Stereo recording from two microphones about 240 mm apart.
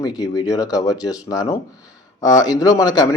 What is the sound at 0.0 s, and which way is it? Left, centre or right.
Speech, centre.